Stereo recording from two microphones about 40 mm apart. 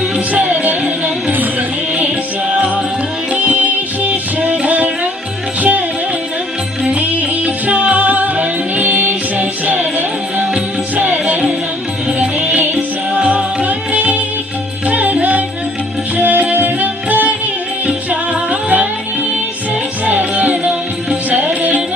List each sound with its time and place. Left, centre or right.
0.3 s music: right
3.3 s music: right
6.9 s music: right
17.8 s music: right
20.1 s music: right